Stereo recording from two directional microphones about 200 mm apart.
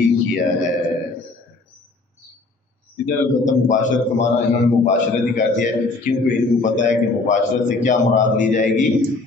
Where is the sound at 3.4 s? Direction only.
40° left (ahead or behind).